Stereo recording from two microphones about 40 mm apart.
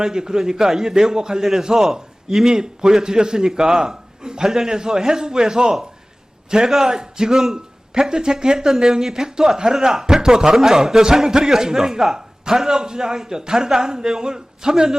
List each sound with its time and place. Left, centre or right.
0.0 s a man's voice: centre